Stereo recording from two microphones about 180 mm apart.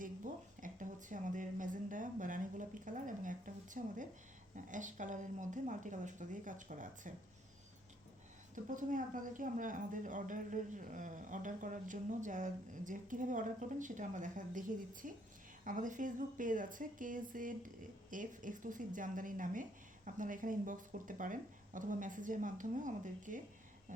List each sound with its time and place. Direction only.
0.6 s speech: 45° right (ahead or behind)
8.7 s speech: 45° right (ahead or behind)